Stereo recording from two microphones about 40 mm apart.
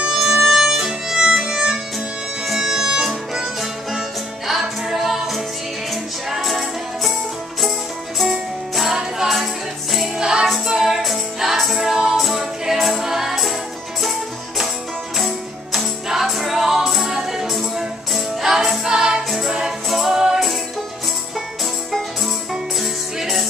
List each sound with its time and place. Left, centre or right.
0.1 s music: centre
0.4 s music: centre
4.5 s music: centre
8.2 s music: centre
15.1 s music: centre
22.5 s music: centre